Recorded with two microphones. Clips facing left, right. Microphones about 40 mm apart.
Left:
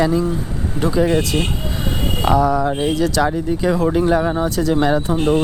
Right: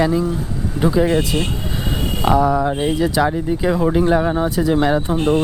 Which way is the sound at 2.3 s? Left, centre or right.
Right.